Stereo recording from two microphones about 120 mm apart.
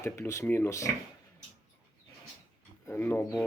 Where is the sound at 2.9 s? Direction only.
15° left (ahead or behind).